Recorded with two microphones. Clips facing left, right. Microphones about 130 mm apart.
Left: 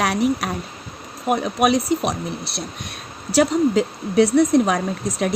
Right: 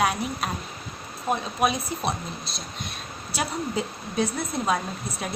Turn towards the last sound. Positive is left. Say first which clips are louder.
# left 10 dB
turn(degrees=90)